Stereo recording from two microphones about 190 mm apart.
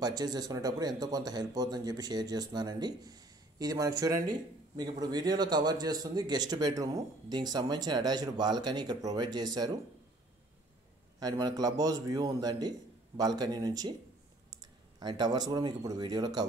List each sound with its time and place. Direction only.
0.0 s speech: 20° right (ahead or behind)
11.1 s speech: 20° right (ahead or behind)